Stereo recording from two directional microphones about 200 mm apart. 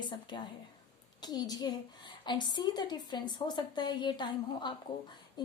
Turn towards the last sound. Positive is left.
turn(degrees=20)  # may be behind; listen again after turning